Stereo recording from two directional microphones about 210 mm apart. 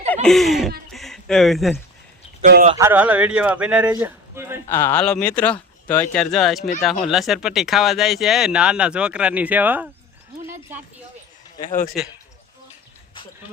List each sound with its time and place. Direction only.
0.1 s speech: 5° left (ahead or behind)
0.9 s a sound: centre (ahead or behind)
2.4 s speech: 40° right (ahead or behind)
2.7 s speech: 10° right (ahead or behind)
4.7 s speech: 10° left (ahead or behind); by 9.9 s 10° right (ahead or behind)